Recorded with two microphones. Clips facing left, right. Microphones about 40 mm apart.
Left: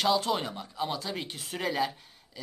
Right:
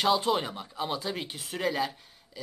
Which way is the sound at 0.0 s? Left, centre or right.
Centre.